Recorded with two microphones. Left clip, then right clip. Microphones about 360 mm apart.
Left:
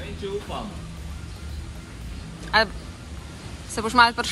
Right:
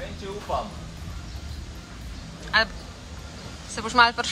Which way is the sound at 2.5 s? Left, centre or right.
Centre.